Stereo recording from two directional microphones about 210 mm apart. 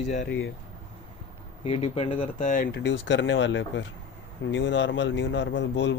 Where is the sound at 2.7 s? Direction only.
55° left (ahead or behind).